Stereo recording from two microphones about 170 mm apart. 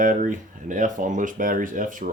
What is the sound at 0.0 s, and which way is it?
Speech, 50° right (ahead or behind).